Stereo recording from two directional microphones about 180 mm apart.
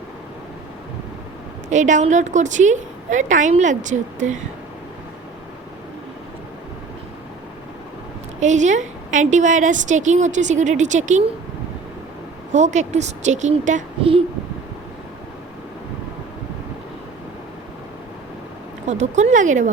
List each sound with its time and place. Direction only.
1.7 s a woman's voice: 40° right (ahead or behind)
8.4 s a woman's voice: 40° right (ahead or behind)
12.5 s a woman's voice: 40° right (ahead or behind)
14.0 s a woman's voice: 30° right (ahead or behind)
18.9 s a woman's voice: 40° right (ahead or behind)